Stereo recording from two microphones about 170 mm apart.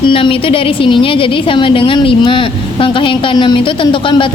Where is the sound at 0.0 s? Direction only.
30° left (ahead or behind).